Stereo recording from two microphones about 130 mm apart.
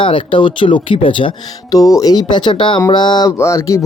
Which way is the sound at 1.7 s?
25° left (ahead or behind).